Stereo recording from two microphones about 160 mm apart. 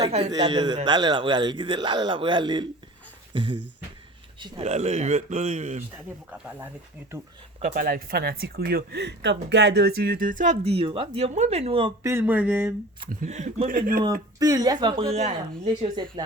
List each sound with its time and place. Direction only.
0.3 s a man's voice: 30° right (ahead or behind)
4.6 s speech: 45° right (ahead or behind)
7.6 s speech: 65° right (ahead or behind); by 11.9 s 35° right (ahead or behind)
12.0 s a sound: 15° right (ahead or behind)
13.2 s speech: 45° right (ahead or behind)
14.3 s a man's voice: 20° right (ahead or behind); by 15.4 s 45° right (ahead or behind)
16.2 s a man's voice: 25° right (ahead or behind)